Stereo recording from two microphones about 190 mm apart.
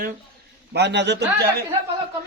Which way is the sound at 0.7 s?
65° right (ahead or behind).